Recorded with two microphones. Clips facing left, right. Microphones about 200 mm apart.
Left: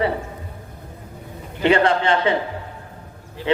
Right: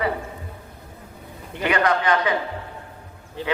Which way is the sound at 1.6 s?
25° left (ahead or behind).